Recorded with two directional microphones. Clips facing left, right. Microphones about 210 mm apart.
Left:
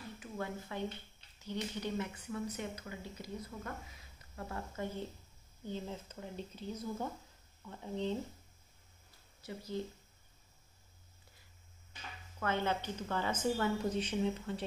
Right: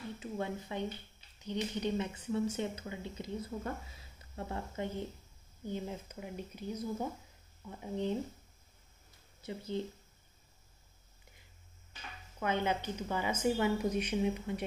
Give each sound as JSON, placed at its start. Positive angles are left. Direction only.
{"t": 0.2, "sound": "a woman's voice", "side_deg": -20}
{"t": 9.4, "sound": "speech", "side_deg": -25}
{"t": 12.4, "sound": "a woman's voice", "side_deg": -15}